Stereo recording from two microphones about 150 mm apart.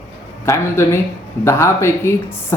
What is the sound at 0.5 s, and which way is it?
Speech, 20° left (ahead or behind).